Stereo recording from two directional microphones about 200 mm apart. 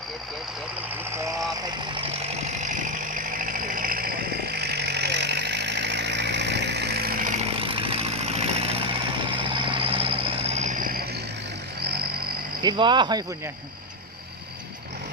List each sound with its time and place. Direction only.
1.9 s vehicle: 30° right (ahead or behind)
7.4 s vehicle: 25° right (ahead or behind); by 11.2 s 50° right (ahead or behind)
12.6 s speech: 25° right (ahead or behind)